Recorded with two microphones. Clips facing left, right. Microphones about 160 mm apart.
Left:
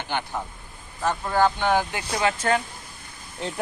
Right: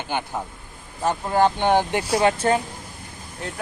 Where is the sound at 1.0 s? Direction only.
20° right (ahead or behind).